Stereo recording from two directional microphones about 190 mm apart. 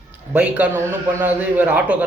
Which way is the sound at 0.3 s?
5° right (ahead or behind).